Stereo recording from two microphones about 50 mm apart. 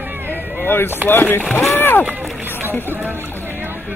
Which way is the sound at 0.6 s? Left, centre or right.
Left.